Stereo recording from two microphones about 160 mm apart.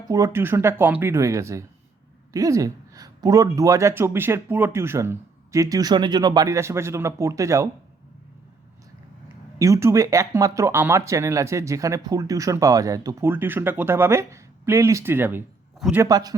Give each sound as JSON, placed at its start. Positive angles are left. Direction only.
{"t": 0.1, "sound": "speech", "side_deg": -15}
{"t": 9.6, "sound": "speech", "side_deg": -20}